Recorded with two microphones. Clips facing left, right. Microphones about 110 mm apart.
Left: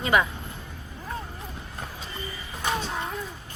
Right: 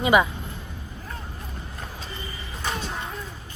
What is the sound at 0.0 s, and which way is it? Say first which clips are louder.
Speech: right 4 dB; 15° right (ahead or behind).